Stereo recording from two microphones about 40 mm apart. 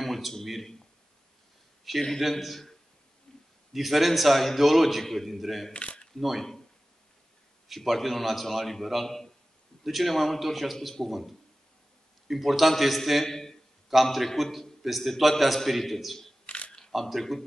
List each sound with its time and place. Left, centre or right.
0.0 s a sound: centre
1.9 s a man's voice: centre
3.7 s a man's voice: centre
5.7 s speech: left
6.1 s a man's voice: centre
7.6 s a man's voice: centre
13.2 s a man's voice: centre
16.4 s camera: left
17.1 s a man's voice: centre